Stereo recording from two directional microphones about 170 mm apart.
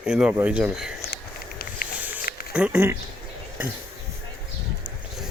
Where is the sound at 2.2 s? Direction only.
60° left (ahead or behind).